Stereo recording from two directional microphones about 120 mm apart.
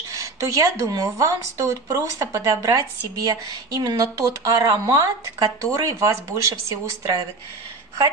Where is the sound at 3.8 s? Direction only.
30° right (ahead or behind).